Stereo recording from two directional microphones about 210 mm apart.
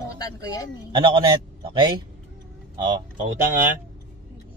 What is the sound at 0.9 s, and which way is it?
Speech, 20° right (ahead or behind).